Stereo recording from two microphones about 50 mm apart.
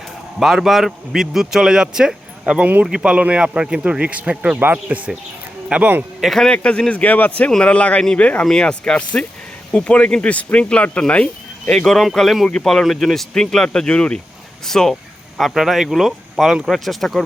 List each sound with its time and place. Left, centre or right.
0.3 s a man's voice: centre; by 5.9 s right
6.1 s speech: centre
6.5 s speech: centre
7.0 s speech: left; by 11.9 s centre
12.1 s speech: centre
14.6 s speech: centre
15.5 s speech: centre